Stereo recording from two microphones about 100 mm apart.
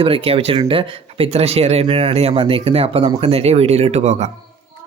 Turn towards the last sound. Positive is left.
turn(degrees=-90)